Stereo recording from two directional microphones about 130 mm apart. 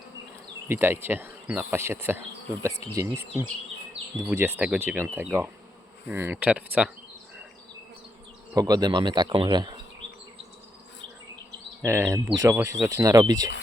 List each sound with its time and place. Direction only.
0.7 s bee: 15° right (ahead or behind)
2.9 s speech: 20° right (ahead or behind)
4.3 s bee: 15° right (ahead or behind)
8.5 s speech: 30° right (ahead or behind)
11.9 s speech: 20° right (ahead or behind)